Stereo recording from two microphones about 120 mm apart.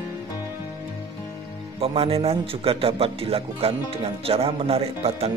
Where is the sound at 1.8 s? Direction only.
55° right (ahead or behind).